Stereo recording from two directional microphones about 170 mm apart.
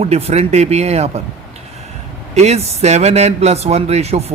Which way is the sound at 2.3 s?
40° right (ahead or behind).